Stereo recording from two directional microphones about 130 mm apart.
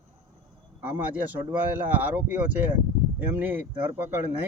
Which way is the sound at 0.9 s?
15° right (ahead or behind).